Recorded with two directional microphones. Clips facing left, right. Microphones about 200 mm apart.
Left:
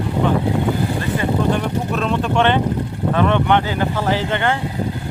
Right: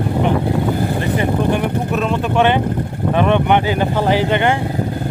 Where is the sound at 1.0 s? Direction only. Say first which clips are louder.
Right 2 dB; 15° right (ahead or behind).